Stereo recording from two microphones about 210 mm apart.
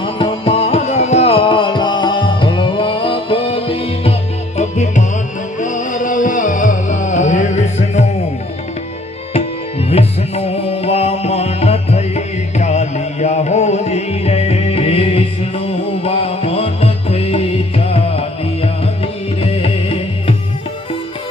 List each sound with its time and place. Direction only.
0.0 s music: 25° left (ahead or behind)
9.9 s music: 30° left (ahead or behind)